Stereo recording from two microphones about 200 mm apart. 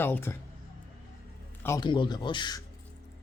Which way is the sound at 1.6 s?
20° left (ahead or behind).